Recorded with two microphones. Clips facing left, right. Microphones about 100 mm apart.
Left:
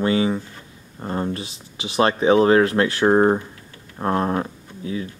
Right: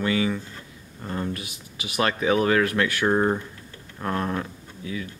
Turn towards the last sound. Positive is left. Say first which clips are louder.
# left 5 dB
turn(degrees=30)  # may be behind; listen again after turning